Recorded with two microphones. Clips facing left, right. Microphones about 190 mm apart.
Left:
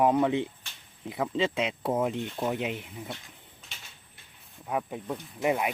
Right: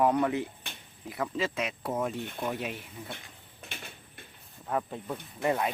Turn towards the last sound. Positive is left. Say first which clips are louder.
# left 1 dB
turn(degrees=15)  # may be behind; listen again after turning